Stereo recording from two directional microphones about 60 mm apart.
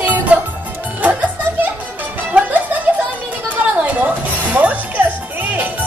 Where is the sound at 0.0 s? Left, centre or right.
Right.